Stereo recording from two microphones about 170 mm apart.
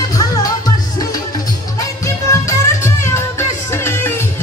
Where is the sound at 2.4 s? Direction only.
15° left (ahead or behind).